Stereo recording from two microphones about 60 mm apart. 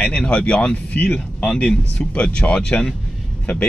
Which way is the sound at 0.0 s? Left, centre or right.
Centre.